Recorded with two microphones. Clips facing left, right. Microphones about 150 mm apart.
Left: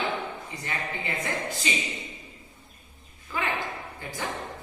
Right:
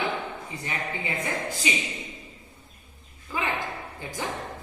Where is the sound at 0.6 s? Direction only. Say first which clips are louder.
Right 1 dB; 20° right (ahead or behind).